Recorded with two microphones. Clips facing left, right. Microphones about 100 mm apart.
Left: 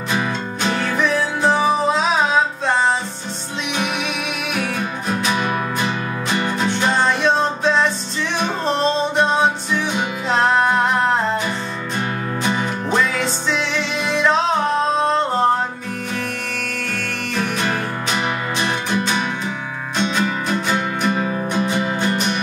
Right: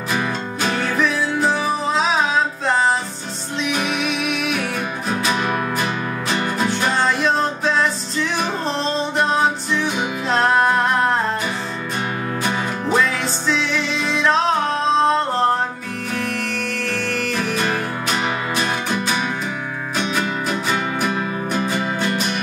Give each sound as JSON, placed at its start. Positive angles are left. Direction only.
{"t": 0.1, "sound": "music", "side_deg": -5}
{"t": 3.7, "sound": "music", "side_deg": 0}
{"t": 12.5, "sound": "music", "side_deg": -5}
{"t": 16.9, "sound": "music", "side_deg": 0}
{"t": 21.5, "sound": "music", "side_deg": 25}